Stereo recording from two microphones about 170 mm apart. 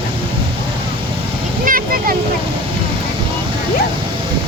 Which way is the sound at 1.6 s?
55° right (ahead or behind).